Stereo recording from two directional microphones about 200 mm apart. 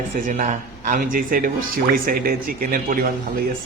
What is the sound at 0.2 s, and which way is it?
Speech, 40° right (ahead or behind).